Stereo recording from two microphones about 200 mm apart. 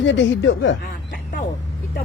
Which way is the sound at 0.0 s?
65° left (ahead or behind).